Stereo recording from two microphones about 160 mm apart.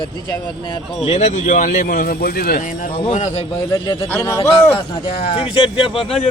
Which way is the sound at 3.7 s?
25° left (ahead or behind).